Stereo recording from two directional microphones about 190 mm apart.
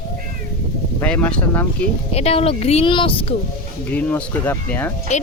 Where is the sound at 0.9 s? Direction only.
5° left (ahead or behind).